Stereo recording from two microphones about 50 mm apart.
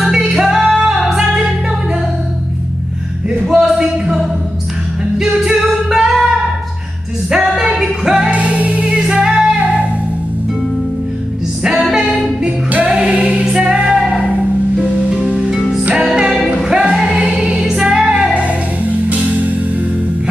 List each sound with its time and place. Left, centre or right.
0.0 s music: centre
3.4 s a sound: centre
5.5 s music: centre
8.3 s music: right
11.6 s music: centre
13.0 s music: right
13.8 s music: centre
14.1 s music: centre
18.3 s music: right